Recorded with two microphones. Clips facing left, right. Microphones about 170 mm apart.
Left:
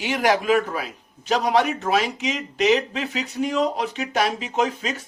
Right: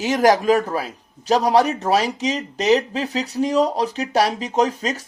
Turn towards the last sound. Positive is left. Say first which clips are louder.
# right 4 dB
turn(degrees=-40)  # may be behind; listen again after turning